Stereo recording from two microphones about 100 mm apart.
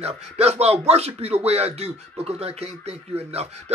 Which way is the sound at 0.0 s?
90° right.